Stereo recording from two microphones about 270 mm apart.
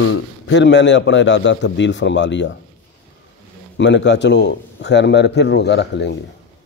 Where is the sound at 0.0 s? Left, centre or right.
Left.